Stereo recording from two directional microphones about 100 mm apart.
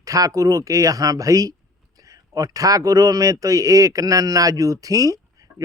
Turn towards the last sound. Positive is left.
turn(degrees=-35)  # may be behind; listen again after turning